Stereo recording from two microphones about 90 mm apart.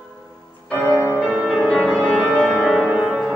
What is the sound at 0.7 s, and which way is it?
Music, 30° left (ahead or behind).